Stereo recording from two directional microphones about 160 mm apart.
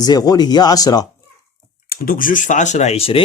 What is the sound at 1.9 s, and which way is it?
Speech, 65° left (ahead or behind).